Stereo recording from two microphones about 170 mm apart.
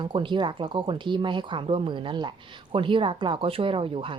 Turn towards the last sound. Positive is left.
turn(degrees=-30)  # may be behind; listen again after turning